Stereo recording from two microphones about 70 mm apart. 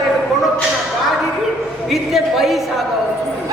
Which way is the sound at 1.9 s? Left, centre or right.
Centre.